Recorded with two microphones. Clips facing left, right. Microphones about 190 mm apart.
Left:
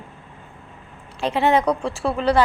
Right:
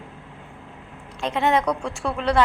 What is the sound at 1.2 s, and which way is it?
Speech, 35° left (ahead or behind).